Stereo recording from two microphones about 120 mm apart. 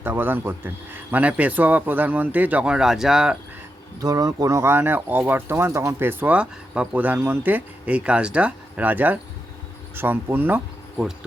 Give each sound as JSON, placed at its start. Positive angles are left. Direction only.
{"t": 0.0, "sound": "speech", "side_deg": -15}
{"t": 4.0, "sound": "speech", "side_deg": -30}
{"t": 10.9, "sound": "speech", "side_deg": -5}